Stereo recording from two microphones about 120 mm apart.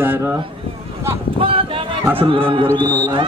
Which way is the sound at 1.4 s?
50° right (ahead or behind).